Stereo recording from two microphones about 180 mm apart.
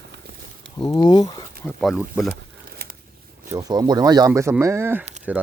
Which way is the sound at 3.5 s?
20° right (ahead or behind).